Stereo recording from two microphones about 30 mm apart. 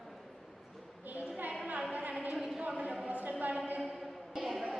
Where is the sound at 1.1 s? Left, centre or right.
Right.